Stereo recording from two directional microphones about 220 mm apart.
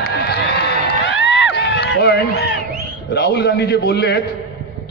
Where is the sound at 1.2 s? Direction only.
50° left (ahead or behind).